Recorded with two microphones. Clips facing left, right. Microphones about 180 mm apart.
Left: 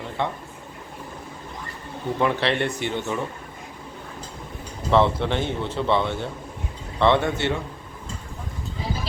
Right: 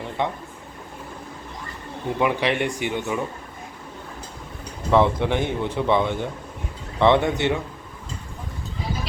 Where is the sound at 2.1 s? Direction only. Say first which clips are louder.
Right 1 dB; 10° right (ahead or behind).